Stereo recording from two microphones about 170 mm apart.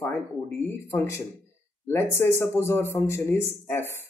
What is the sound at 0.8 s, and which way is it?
A man's voice, 15° left (ahead or behind).